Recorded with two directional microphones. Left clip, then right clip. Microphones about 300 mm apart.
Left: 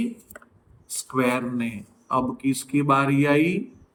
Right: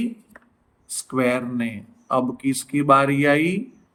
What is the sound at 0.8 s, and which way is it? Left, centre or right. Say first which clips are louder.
A man's voice: right 2 dB; centre.